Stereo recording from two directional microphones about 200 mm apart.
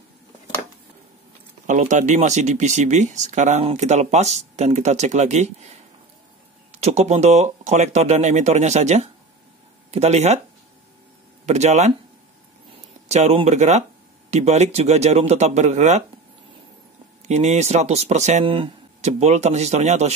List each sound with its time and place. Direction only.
1.7 s speech: 35° right (ahead or behind)
11.4 s speech: 35° right (ahead or behind)
13.1 s speech: 35° right (ahead or behind)
17.3 s speech: 35° right (ahead or behind)